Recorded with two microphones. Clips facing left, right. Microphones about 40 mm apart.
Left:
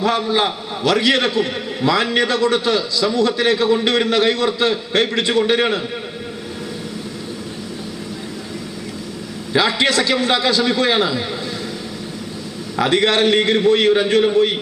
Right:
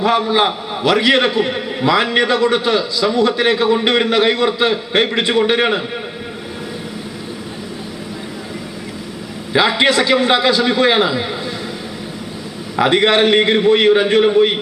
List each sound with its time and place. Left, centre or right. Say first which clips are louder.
0.0 s a man's voice: right 3 dB; centre
9.5 s a man's voice: right 3 dB; right
12.7 s a man's voice: right 3 dB; right